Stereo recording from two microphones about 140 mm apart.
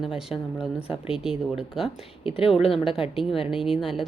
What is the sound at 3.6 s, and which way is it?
Speech, centre (ahead or behind).